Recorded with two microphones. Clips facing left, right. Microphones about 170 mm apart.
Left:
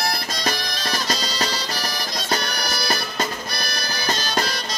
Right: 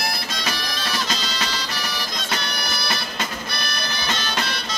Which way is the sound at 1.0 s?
40° left (ahead or behind).